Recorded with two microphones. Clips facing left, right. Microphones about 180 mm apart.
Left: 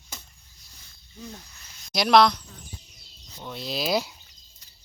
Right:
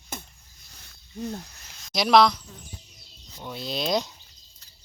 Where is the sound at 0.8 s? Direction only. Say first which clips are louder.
Right 9 dB; 65° right (ahead or behind).